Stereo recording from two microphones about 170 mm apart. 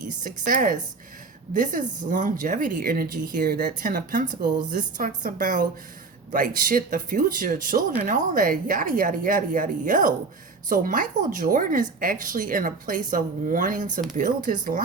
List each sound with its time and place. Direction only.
0.2 s speech: 55° right (ahead or behind)